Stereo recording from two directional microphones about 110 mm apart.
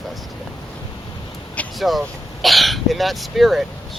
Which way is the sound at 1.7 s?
Centre (ahead or behind).